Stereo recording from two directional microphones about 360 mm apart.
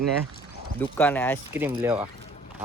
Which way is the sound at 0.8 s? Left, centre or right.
Centre.